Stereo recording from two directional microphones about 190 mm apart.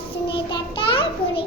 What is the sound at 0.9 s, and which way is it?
Speech, 30° left (ahead or behind).